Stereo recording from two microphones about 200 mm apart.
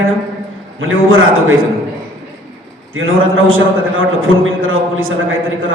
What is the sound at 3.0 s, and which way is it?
A man's voice, 80° right.